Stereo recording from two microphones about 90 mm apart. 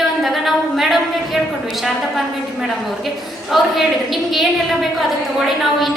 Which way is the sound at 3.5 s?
Centre (ahead or behind).